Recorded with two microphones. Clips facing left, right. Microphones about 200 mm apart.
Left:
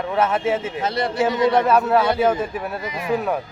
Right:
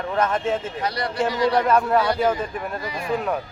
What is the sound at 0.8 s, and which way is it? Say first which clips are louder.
Speech: left 4 dB; 25° left (ahead or behind).